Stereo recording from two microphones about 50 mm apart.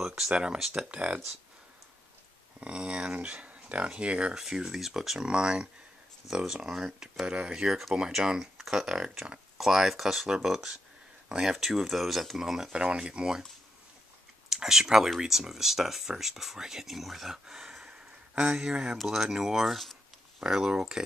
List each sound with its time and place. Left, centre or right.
0.0 s a sound: centre
0.3 s speech: centre
2.6 s speech: right
4.4 s speech: centre
12.7 s speech: centre
14.5 s speech: centre
18.9 s speech: centre